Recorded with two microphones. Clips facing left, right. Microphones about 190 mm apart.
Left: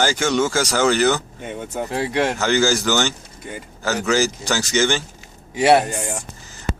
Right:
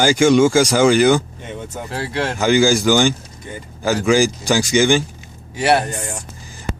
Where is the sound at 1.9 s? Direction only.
20° left (ahead or behind).